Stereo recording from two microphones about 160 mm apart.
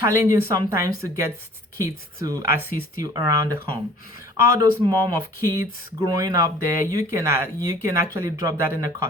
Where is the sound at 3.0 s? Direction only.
25° right (ahead or behind).